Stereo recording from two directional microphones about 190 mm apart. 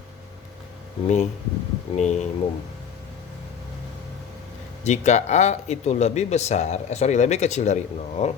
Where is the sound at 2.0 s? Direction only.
35° left (ahead or behind).